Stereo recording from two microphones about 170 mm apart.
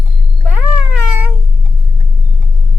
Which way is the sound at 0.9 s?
10° right (ahead or behind).